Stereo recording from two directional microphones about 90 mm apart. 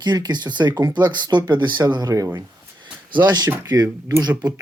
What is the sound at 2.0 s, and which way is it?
Speech, 40° right (ahead or behind).